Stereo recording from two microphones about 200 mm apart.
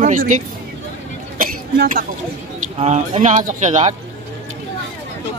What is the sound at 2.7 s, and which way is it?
Speech, 35° right (ahead or behind).